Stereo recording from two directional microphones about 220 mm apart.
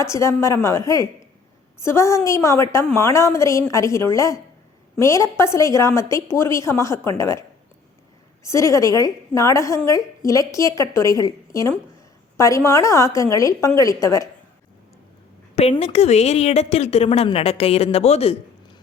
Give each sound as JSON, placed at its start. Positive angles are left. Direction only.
{"t": 0.0, "sound": "a woman's voice", "side_deg": 15}
{"t": 8.4, "sound": "a woman's voice", "side_deg": 15}
{"t": 15.5, "sound": "a woman's voice", "side_deg": 30}